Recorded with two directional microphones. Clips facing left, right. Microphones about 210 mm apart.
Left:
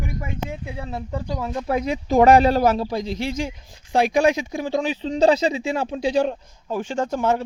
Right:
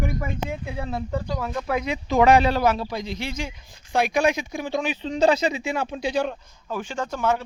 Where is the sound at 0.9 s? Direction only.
20° left (ahead or behind).